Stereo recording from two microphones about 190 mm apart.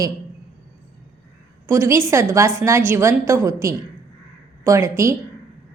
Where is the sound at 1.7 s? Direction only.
15° right (ahead or behind).